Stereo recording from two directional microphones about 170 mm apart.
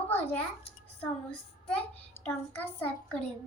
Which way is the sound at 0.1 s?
15° left (ahead or behind).